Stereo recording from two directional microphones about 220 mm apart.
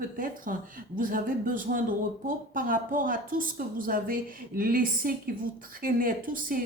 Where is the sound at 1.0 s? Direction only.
35° right (ahead or behind).